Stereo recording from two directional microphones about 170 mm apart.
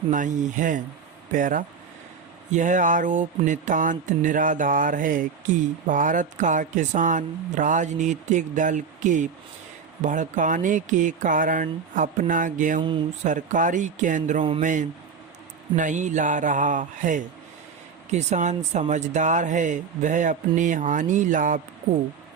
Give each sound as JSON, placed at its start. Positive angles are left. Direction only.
{"t": 0.1, "sound": "music", "side_deg": -50}